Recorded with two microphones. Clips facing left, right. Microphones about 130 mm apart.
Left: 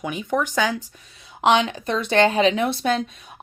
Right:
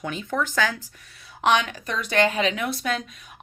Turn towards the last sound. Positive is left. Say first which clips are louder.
# left 6 dB
turn(degrees=30)  # may be behind; listen again after turning